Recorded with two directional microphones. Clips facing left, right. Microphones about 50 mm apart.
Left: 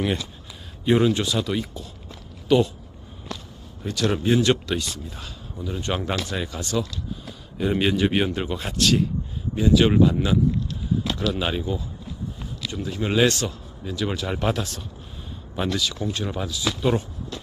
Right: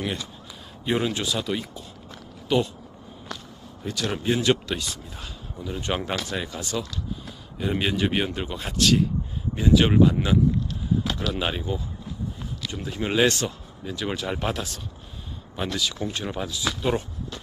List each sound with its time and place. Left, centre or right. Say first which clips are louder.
0.8 s speech: left 5 dB; centre
3.8 s speech: left 4 dB; centre
5.8 s speech: even; right
6.3 s speech: left 3 dB; centre
9.6 s speech: left 1 dB; centre
12.7 s speech: left 1 dB; centre
14.2 s speech: left 4 dB; centre
15.7 s speech: even; centre
16.0 s speech: left 2 dB; right